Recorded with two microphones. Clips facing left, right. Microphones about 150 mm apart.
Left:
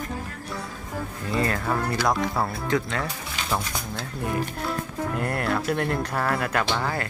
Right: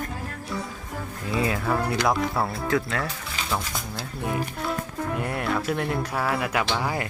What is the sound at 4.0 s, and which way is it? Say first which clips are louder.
Speech: even; centre (ahead or behind).